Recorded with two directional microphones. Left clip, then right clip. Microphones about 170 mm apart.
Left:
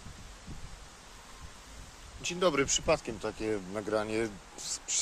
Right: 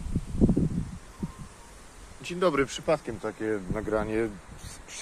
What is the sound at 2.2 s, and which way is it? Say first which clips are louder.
Speech: right 3 dB; 10° left (ahead or behind).